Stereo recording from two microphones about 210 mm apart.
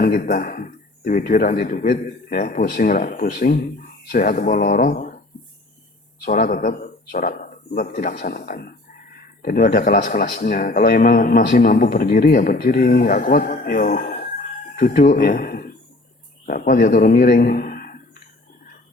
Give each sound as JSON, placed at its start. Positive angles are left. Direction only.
{"t": 0.0, "sound": "a man's voice", "side_deg": 45}
{"t": 6.2, "sound": "a man's voice", "side_deg": 45}